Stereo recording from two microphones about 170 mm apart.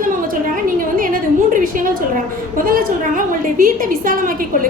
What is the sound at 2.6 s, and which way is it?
A woman's voice, 55° right (ahead or behind).